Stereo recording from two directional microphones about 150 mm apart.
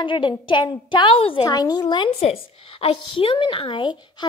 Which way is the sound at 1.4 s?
25° left (ahead or behind).